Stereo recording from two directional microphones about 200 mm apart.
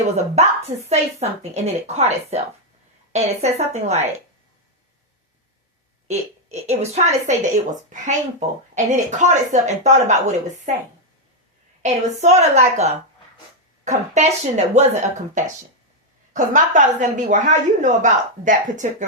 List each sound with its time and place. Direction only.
0.0 s a woman's voice: 35° right (ahead or behind)
6.1 s a woman's voice: 35° right (ahead or behind)
16.3 s a woman's voice: 40° right (ahead or behind)